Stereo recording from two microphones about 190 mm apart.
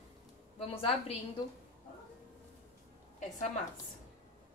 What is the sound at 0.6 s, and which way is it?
Speech, 30° left (ahead or behind).